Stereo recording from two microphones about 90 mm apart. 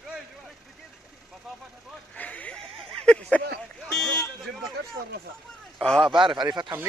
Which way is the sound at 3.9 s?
5° left (ahead or behind).